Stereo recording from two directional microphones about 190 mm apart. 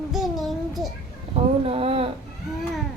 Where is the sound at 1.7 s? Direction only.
30° right (ahead or behind).